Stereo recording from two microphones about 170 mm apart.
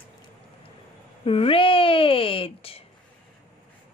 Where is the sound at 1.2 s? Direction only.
35° left (ahead or behind).